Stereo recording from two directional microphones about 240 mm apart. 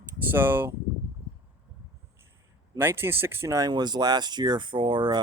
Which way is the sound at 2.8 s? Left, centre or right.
Centre.